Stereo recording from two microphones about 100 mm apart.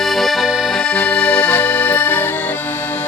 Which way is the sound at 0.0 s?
Centre (ahead or behind).